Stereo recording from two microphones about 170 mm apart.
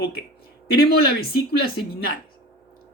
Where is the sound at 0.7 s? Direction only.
70° left (ahead or behind).